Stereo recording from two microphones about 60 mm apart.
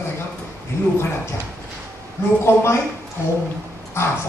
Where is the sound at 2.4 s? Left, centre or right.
Left.